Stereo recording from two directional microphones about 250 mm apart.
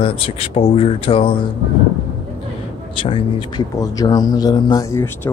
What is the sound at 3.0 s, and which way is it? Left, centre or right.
A man's voice, left.